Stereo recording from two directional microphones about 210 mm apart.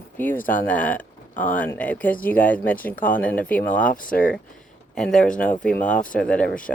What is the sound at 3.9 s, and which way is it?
Speech, 40° left (ahead or behind).